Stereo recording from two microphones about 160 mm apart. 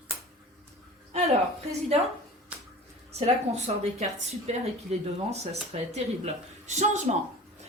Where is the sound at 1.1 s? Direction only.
40° right (ahead or behind).